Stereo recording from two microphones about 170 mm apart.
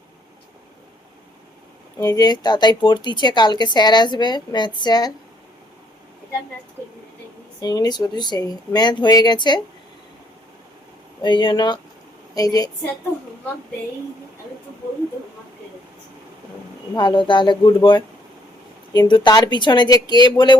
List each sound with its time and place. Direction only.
2.0 s speech: 25° left (ahead or behind)
7.6 s speech: 25° left (ahead or behind)
11.2 s speech: 30° left (ahead or behind)
16.9 s speech: 25° left (ahead or behind)